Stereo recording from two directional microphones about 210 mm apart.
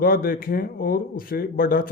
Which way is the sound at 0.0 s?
45° left (ahead or behind).